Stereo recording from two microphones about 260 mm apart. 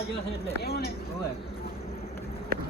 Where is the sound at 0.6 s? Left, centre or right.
Left.